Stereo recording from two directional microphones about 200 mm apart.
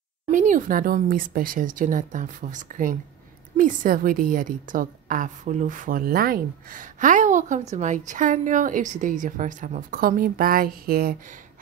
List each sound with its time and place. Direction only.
0.3 s a woman's voice: 40° right (ahead or behind)